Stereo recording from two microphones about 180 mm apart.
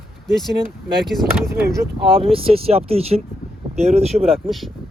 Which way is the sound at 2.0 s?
30° right (ahead or behind).